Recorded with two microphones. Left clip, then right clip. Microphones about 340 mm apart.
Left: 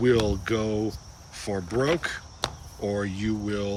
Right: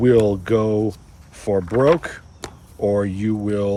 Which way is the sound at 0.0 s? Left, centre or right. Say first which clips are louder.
Right 7 dB; centre.